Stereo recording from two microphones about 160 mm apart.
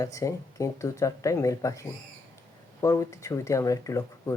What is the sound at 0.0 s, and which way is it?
Speech, 20° left (ahead or behind).